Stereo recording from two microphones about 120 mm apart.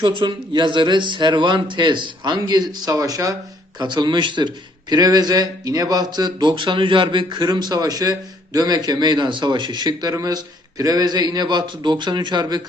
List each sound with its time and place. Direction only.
0.0 s a man's voice: 40° right (ahead or behind)